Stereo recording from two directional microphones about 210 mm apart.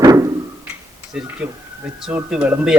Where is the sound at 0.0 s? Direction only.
15° right (ahead or behind).